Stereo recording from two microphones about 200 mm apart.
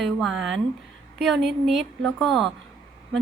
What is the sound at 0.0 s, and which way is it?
A woman's voice, centre (ahead or behind).